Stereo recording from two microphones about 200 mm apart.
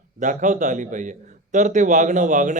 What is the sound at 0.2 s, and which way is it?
A man's voice, 40° right (ahead or behind).